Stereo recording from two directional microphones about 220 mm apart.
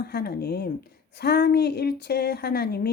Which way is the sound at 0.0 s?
45° left (ahead or behind).